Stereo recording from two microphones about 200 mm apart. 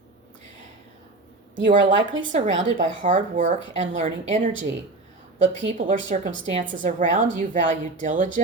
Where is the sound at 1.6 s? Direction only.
40° right (ahead or behind).